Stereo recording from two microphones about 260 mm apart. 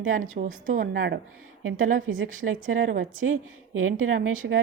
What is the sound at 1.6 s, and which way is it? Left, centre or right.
Speech, right.